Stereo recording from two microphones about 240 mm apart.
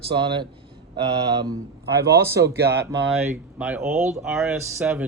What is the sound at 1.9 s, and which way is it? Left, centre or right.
Speech, right.